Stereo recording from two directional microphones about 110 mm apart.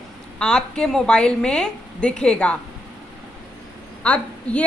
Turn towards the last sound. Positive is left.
turn(degrees=10)  # may be behind; listen again after turning